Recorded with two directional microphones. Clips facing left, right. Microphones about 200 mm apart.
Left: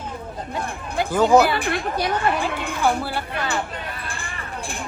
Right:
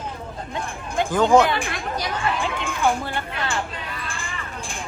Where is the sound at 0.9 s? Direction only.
5° left (ahead or behind).